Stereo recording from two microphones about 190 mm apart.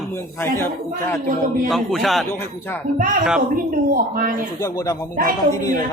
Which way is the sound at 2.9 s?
45° right (ahead or behind).